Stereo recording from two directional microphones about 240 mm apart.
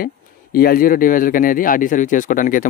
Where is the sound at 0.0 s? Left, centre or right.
Left.